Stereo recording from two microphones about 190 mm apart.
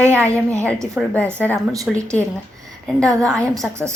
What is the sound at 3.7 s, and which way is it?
Speech, 15° right (ahead or behind).